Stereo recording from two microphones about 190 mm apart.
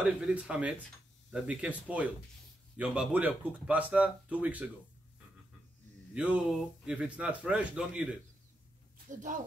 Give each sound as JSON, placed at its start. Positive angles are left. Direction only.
{"t": 0.0, "sound": "a man's voice", "side_deg": -5}
{"t": 6.1, "sound": "a man's voice", "side_deg": -5}
{"t": 9.1, "sound": "speech", "side_deg": -40}